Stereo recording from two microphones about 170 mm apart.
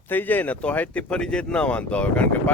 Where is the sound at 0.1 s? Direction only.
10° left (ahead or behind).